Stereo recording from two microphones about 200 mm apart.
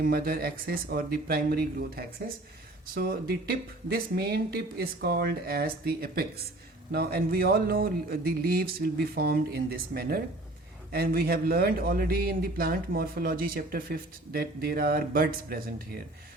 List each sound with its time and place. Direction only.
0.0 s speech: 50° right (ahead or behind)